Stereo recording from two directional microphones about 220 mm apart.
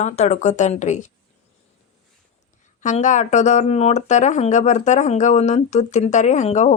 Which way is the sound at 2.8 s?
35° left (ahead or behind).